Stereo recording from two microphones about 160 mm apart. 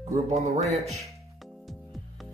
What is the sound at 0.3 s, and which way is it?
Speech, 45° right (ahead or behind).